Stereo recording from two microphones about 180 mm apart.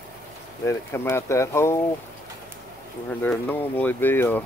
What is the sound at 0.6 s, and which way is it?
Speech, 15° left (ahead or behind).